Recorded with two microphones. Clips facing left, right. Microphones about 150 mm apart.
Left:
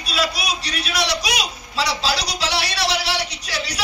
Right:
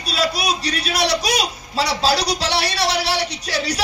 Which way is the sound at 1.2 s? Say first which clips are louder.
Right 4 dB; 40° right (ahead or behind).